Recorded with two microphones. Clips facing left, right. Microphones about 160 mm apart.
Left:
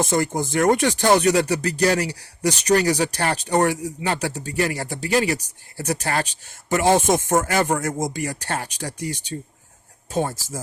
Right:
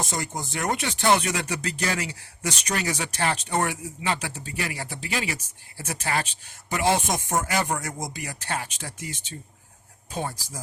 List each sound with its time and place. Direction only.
0.0 s speech: 55° left (ahead or behind)
10.1 s speech: 45° left (ahead or behind)